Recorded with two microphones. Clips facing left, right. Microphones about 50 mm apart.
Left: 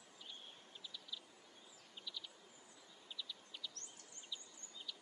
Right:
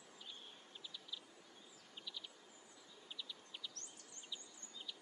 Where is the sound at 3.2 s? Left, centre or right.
Centre.